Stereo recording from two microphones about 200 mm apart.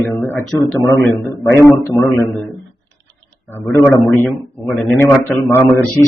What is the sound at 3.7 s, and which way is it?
A man's voice, 10° left (ahead or behind).